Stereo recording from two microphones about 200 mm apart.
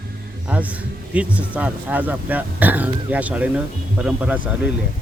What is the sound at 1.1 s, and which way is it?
Speech, 5° right (ahead or behind).